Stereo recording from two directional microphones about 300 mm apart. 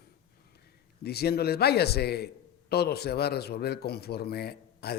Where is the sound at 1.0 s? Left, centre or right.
Left.